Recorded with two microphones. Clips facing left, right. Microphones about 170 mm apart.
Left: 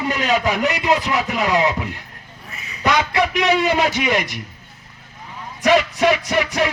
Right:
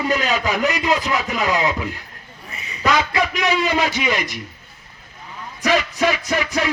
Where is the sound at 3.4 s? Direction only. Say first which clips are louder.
Left 3 dB; 65° left (ahead or behind).